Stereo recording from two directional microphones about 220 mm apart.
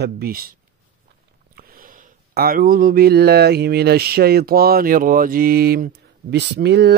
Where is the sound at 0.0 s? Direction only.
45° right (ahead or behind).